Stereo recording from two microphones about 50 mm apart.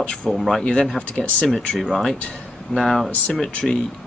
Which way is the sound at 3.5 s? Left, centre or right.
Centre.